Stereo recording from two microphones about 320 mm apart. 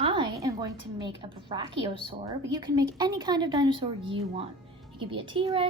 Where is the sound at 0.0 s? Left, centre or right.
Centre.